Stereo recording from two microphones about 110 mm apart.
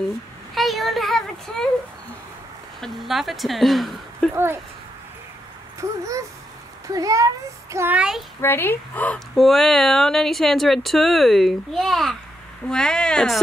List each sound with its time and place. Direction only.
0.6 s speech: centre (ahead or behind)
2.8 s speech: centre (ahead or behind)
5.8 s a child's voice: 30° right (ahead or behind)
7.9 s speech: 10° right (ahead or behind)
8.4 s speech: 20° left (ahead or behind)
9.3 s speech: centre (ahead or behind)